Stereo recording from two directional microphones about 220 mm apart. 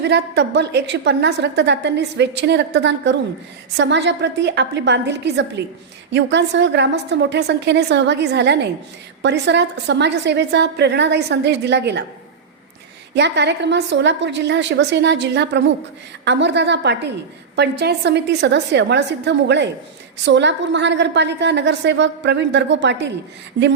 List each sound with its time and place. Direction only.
0.0 s a woman's voice: 50° right (ahead or behind)
13.1 s a woman's voice: 50° right (ahead or behind)